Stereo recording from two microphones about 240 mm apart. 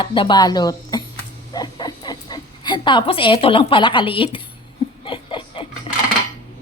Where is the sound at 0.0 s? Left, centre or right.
Left.